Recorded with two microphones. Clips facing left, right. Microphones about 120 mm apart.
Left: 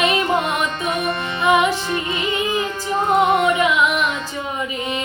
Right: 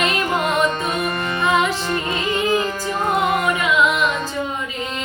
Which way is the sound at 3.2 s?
25° left (ahead or behind).